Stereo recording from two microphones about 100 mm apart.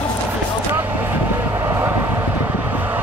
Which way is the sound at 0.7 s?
20° right (ahead or behind).